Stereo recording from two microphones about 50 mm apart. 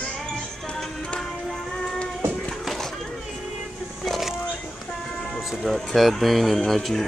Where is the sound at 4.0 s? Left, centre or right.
Centre.